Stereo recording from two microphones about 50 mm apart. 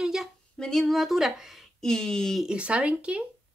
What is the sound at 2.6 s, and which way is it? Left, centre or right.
Speech, right.